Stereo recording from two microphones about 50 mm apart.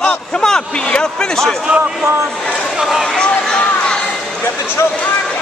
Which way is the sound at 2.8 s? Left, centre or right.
Centre.